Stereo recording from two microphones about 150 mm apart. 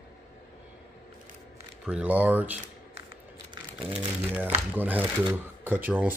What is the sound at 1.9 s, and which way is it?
Speech, 10° right (ahead or behind).